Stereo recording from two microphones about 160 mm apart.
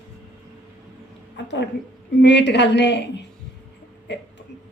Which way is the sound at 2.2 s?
90° left.